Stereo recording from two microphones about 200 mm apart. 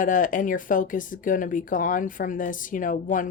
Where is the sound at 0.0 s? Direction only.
40° left (ahead or behind).